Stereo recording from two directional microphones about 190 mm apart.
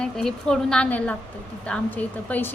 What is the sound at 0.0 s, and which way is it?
A woman's voice, 5° left (ahead or behind).